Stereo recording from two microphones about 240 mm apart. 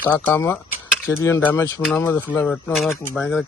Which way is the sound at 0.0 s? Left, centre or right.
Centre.